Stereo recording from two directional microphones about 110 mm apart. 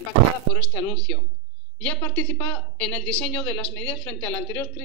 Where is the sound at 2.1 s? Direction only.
15° left (ahead or behind).